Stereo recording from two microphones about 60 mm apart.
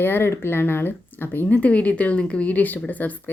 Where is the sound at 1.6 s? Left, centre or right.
Left.